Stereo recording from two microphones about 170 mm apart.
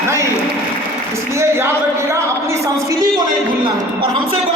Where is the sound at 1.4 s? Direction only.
15° right (ahead or behind).